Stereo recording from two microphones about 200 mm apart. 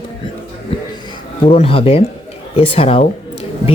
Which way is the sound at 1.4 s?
30° left (ahead or behind).